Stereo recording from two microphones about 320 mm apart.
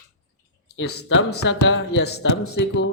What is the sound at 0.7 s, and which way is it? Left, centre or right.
Speech, left.